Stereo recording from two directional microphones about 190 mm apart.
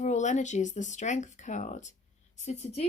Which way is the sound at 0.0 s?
40° left (ahead or behind).